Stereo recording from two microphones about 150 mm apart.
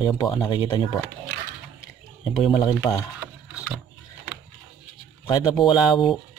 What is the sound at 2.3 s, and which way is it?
Speech, centre (ahead or behind).